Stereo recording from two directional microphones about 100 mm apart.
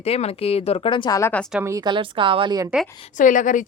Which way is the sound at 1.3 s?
15° left (ahead or behind).